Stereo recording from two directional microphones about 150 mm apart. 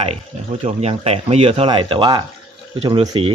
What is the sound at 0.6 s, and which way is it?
Speech, 45° right (ahead or behind).